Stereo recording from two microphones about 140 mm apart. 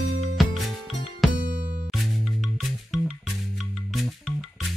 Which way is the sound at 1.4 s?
85° right.